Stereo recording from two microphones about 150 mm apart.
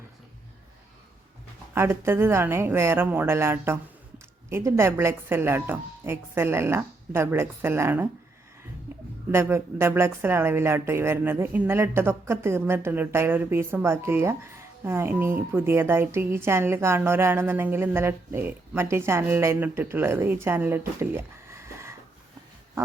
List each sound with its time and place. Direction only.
1.7 s a woman's voice: 15° right (ahead or behind)
9.3 s a woman's voice: 15° right (ahead or behind)